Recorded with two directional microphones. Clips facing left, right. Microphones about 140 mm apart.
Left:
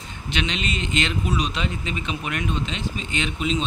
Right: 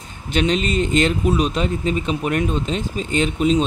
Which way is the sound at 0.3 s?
40° right (ahead or behind).